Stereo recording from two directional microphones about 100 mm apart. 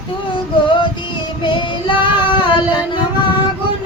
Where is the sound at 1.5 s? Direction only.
55° left (ahead or behind).